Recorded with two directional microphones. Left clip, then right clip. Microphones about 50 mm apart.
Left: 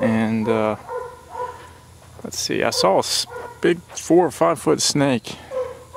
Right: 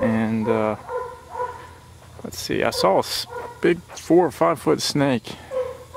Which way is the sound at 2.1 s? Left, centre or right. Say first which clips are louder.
Left 2 dB; left.